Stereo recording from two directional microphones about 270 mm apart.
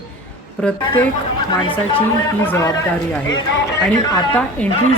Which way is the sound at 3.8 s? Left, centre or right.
Centre.